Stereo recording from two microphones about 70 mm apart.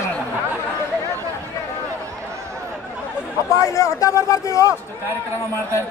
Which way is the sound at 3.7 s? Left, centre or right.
Left.